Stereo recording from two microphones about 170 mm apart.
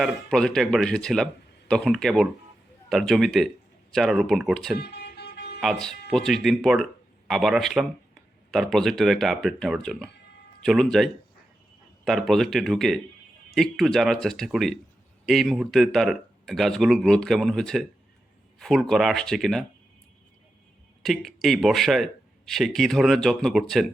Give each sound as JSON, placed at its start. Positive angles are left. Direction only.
{"t": 0.0, "sound": "speech", "side_deg": 5}
{"t": 4.8, "sound": "vehicle", "side_deg": 75}
{"t": 5.5, "sound": "speech", "side_deg": 0}
{"t": 21.0, "sound": "speech", "side_deg": 0}